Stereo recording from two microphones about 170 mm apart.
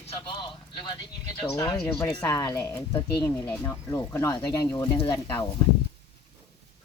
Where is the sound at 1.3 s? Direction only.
25° left (ahead or behind).